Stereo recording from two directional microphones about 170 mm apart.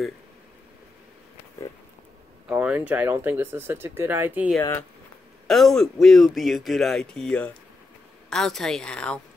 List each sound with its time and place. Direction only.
2.5 s speech: 10° right (ahead or behind)
4.6 s speech: 15° left (ahead or behind)
5.5 s speech: centre (ahead or behind)